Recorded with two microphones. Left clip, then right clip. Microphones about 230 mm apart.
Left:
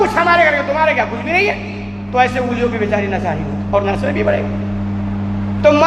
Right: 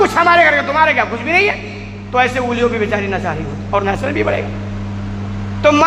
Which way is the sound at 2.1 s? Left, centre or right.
Right.